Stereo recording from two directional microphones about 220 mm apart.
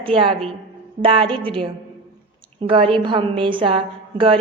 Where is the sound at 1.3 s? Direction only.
5° left (ahead or behind).